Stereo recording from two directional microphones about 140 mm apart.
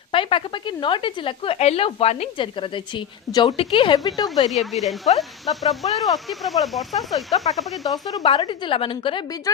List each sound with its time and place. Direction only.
0.1 s speech: 40° left (ahead or behind)
4.6 s speech: centre (ahead or behind)
8.0 s speech: 30° left (ahead or behind)